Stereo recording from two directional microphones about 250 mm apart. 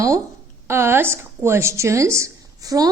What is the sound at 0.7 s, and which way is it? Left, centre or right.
A woman's voice, centre.